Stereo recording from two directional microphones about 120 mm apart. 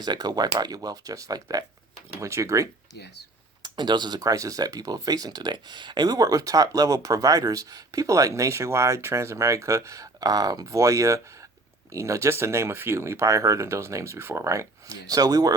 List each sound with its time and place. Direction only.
0.0 s speech: 35° right (ahead or behind)
3.6 s speech: 35° right (ahead or behind)